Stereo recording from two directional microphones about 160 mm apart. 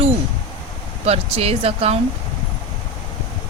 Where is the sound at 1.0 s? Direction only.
40° right (ahead or behind).